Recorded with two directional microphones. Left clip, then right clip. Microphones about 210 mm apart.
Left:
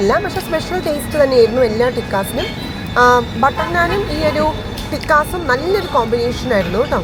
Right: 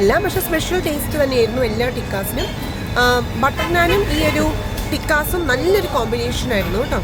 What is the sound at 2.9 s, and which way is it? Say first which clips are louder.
Speech: left 5 dB; 25° right (ahead or behind).